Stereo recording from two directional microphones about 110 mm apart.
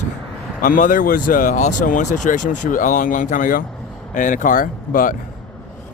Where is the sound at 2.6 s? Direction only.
90° left.